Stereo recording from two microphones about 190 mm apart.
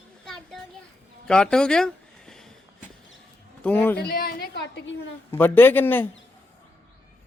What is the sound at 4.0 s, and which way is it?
Speech, 55° left (ahead or behind).